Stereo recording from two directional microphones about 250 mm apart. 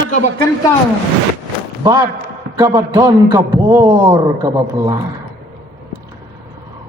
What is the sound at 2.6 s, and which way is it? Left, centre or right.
A man's voice, centre.